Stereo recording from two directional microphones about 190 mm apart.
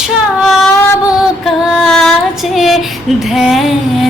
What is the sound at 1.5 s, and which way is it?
Female singing, centre (ahead or behind).